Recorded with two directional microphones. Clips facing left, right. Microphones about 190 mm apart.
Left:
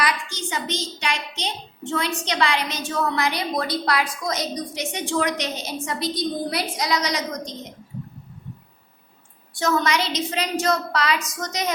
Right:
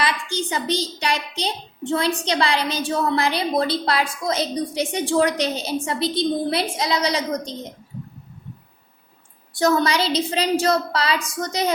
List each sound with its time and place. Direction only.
0.0 s a woman's voice: 30° right (ahead or behind)
9.6 s a woman's voice: 35° right (ahead or behind)